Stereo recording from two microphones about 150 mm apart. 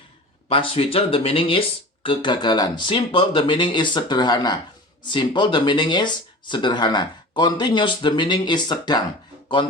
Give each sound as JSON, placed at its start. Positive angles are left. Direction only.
{"t": 0.4, "sound": "speech", "side_deg": 35}